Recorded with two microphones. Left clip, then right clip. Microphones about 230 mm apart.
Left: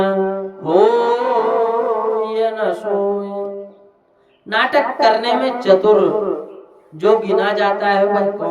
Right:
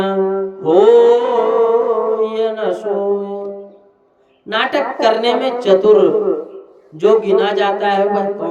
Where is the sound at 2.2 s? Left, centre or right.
Centre.